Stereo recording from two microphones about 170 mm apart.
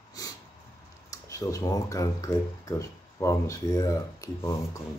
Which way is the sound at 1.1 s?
20° left (ahead or behind).